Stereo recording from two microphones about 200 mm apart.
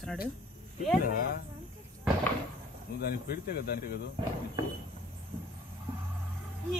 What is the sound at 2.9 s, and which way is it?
Speech, 55° left (ahead or behind).